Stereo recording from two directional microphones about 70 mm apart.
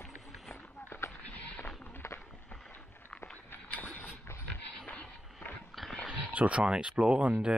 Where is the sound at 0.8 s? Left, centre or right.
Left.